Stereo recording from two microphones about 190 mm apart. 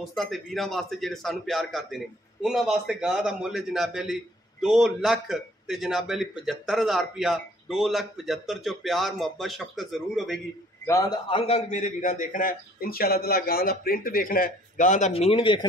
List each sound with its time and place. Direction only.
0.0 s a man's voice: centre (ahead or behind)
10.9 s a man's voice: 20° left (ahead or behind)